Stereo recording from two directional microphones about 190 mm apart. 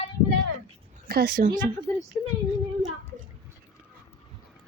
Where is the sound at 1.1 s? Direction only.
55° right (ahead or behind).